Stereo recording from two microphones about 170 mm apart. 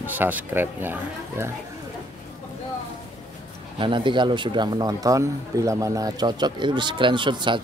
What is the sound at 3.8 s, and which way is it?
Speech, 30° right (ahead or behind).